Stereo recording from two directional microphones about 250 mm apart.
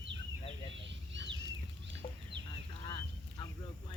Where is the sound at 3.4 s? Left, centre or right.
Centre.